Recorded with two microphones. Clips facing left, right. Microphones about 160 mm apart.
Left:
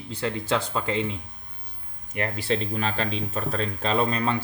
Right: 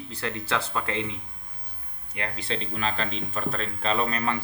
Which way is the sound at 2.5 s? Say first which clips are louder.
Left 3 dB; 45° left (ahead or behind).